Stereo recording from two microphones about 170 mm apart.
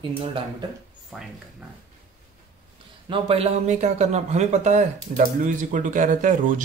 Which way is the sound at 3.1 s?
35° right (ahead or behind).